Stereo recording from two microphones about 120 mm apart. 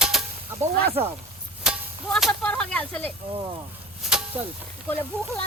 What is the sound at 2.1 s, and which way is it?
Speech, centre (ahead or behind).